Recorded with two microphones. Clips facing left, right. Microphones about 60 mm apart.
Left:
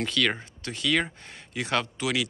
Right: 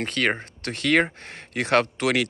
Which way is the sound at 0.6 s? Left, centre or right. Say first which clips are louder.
Right 6 dB; right.